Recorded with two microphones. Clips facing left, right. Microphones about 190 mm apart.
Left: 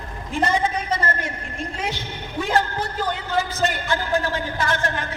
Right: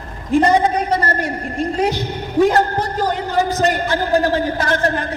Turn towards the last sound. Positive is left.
turn(degrees=-40)  # may be behind; listen again after turning